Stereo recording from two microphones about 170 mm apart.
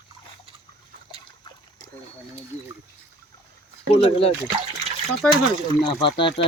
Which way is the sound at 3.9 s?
35° left (ahead or behind).